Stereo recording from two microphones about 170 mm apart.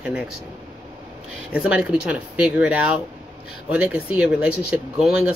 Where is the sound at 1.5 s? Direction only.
5° right (ahead or behind).